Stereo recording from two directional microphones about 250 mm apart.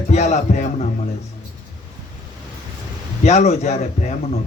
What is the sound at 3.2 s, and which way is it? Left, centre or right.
Speech, left.